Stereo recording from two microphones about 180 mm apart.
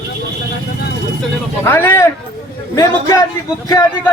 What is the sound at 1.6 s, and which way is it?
A man's voice, 10° left (ahead or behind).